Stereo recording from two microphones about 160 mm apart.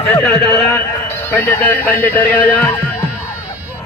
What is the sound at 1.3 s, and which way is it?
Speech, 15° left (ahead or behind).